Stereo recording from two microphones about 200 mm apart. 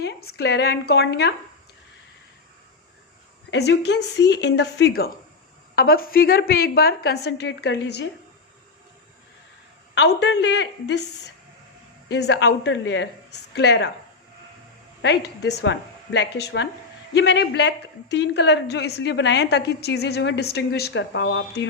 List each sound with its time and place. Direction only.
0.0 s a woman's voice: 55° left (ahead or behind)
3.5 s a woman's voice: 60° left (ahead or behind)
10.2 s a woman's voice: 60° left (ahead or behind)
12.1 s a woman's voice: 55° left (ahead or behind)
15.0 s a woman's voice: 60° left (ahead or behind)